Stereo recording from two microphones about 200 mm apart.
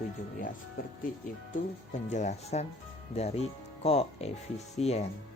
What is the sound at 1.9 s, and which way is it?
Speech, 35° left (ahead or behind).